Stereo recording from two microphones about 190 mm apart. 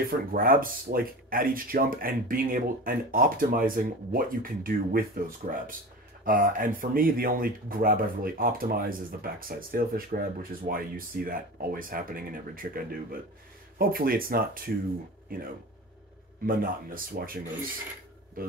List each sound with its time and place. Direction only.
0.1 s speech: 50° right (ahead or behind)